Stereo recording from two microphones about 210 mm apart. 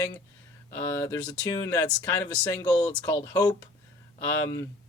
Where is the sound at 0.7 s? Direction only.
15° left (ahead or behind).